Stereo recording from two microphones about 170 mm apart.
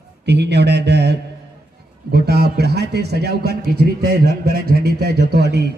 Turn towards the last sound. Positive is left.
turn(degrees=-75)  # may be behind; listen again after turning